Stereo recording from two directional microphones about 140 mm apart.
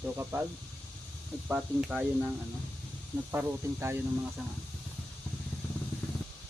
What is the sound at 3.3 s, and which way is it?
Speech, 15° right (ahead or behind).